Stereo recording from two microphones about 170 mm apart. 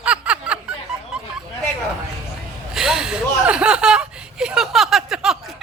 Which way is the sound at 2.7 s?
Centre (ahead or behind).